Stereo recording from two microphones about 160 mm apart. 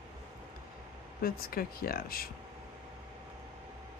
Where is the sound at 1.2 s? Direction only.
70° left (ahead or behind).